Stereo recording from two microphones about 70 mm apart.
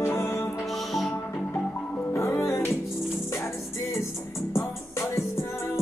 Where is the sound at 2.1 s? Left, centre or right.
Left.